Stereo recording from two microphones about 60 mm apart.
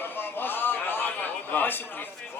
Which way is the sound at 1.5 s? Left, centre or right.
Left.